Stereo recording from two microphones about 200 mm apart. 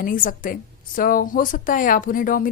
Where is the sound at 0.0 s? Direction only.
45° left (ahead or behind).